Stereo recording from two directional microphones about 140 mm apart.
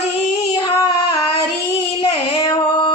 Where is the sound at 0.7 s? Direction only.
25° left (ahead or behind).